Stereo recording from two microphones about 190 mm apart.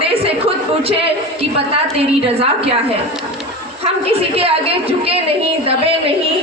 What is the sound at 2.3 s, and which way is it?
Speech, 30° right (ahead or behind).